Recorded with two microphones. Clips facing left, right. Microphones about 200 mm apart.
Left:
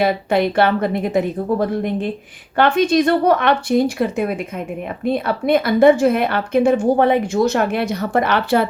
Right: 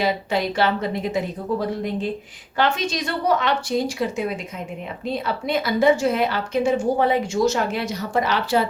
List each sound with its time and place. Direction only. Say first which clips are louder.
0.0 s a woman's voice: left 6 dB; 55° left (ahead or behind)